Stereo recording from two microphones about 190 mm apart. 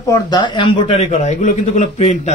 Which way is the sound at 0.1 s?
25° left (ahead or behind).